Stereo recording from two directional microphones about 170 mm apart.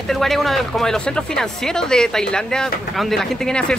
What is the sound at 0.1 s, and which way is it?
Speech, centre (ahead or behind).